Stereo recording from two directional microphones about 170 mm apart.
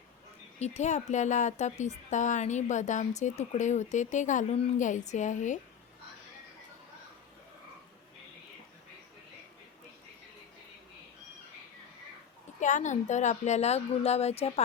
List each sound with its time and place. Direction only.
0.6 s speech: 40° left (ahead or behind)
12.5 s a woman's voice: 45° left (ahead or behind)